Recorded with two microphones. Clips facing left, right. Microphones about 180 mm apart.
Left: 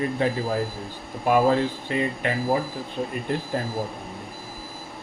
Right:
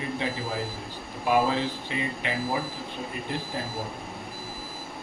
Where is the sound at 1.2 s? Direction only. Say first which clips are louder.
Left 4 dB; 50° left (ahead or behind).